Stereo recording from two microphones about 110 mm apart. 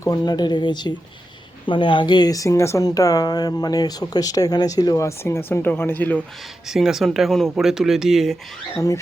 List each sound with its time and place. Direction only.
0.0 s speech: 35° left (ahead or behind); by 6.2 s 15° left (ahead or behind)
6.7 s speech: 5° right (ahead or behind)
8.7 s speech: 30° left (ahead or behind)